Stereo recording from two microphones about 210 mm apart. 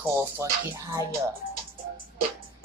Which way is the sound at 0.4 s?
15° right (ahead or behind).